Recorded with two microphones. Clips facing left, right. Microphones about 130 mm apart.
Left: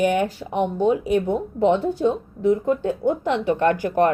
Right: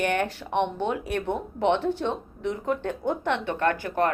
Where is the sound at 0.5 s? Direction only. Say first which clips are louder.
Left 3 dB; 40° left (ahead or behind).